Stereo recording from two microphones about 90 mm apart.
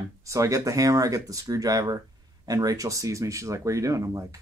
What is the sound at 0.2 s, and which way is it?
Speech, 35° right (ahead or behind).